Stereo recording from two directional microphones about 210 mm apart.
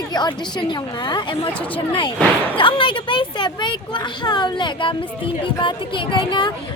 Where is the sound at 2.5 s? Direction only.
25° left (ahead or behind).